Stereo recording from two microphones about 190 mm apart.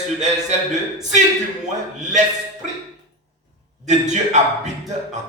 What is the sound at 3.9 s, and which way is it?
Speech, 40° right (ahead or behind).